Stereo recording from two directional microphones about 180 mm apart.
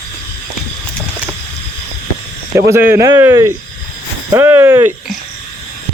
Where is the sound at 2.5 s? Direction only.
15° right (ahead or behind).